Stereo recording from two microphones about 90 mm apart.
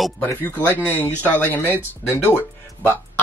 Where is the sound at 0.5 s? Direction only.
20° left (ahead or behind).